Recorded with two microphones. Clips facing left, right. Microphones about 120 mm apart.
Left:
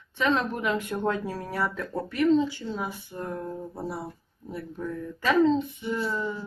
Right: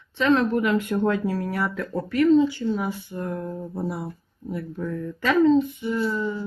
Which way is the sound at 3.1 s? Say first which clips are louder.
Right 4 dB; 10° left (ahead or behind).